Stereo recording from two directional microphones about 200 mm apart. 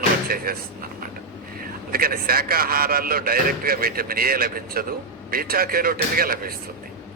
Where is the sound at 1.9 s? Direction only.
50° right (ahead or behind).